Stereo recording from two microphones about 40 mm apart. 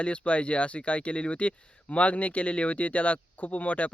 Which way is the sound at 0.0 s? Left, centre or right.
Left.